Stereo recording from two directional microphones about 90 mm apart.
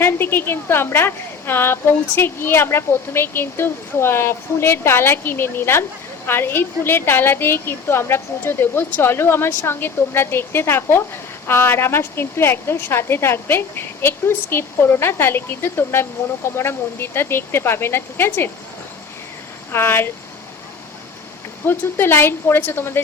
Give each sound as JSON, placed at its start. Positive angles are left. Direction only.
{"t": 0.0, "sound": "a woman's voice", "side_deg": 25}
{"t": 19.7, "sound": "a woman's voice", "side_deg": 25}
{"t": 21.7, "sound": "a woman's voice", "side_deg": 25}